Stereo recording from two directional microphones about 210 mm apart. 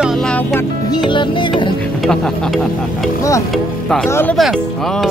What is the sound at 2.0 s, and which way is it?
Speech, centre (ahead or behind).